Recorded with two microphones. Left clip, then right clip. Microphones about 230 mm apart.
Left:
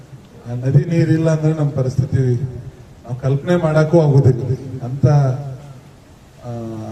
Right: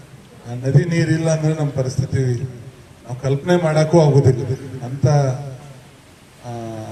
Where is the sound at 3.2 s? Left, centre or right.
Left.